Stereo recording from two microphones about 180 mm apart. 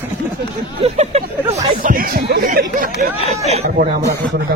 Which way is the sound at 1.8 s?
50° right (ahead or behind).